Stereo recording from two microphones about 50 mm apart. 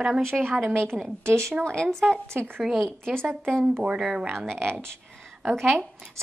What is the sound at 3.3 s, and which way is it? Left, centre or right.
Speech, centre.